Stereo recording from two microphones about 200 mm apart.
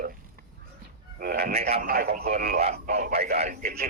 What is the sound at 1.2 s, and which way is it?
A man's voice, 50° right (ahead or behind).